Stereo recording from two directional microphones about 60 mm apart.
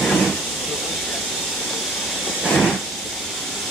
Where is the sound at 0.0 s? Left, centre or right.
Centre.